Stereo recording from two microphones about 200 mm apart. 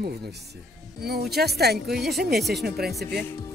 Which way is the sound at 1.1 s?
55° right (ahead or behind).